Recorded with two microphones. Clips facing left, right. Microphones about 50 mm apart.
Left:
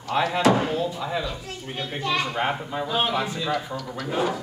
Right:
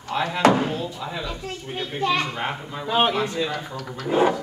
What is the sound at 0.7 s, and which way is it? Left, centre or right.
A child's voice, centre.